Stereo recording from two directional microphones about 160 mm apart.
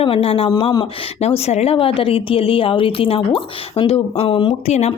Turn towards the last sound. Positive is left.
turn(degrees=45)  # may be behind; listen again after turning